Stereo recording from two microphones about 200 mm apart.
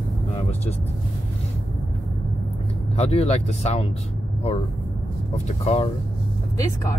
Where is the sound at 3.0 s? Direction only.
35° left (ahead or behind).